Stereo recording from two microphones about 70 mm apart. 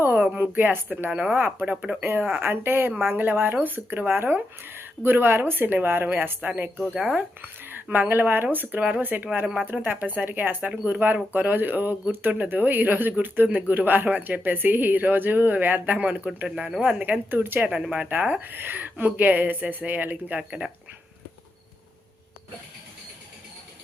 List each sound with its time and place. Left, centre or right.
0.0 s a sound: right
0.3 s speech: right
17.7 s speech: centre